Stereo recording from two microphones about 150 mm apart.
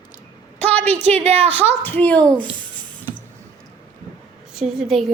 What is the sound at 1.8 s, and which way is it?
Speech, 10° left (ahead or behind).